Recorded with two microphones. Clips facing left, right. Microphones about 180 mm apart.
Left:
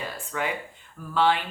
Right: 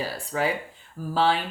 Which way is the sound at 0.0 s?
35° right (ahead or behind).